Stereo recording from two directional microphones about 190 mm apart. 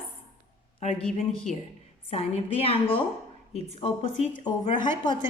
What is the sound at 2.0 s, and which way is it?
A woman's voice, 30° left (ahead or behind).